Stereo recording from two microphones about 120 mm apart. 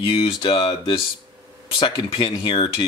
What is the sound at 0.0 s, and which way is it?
Speech, 45° left (ahead or behind).